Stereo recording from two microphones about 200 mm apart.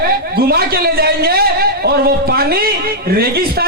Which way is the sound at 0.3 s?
50° right (ahead or behind).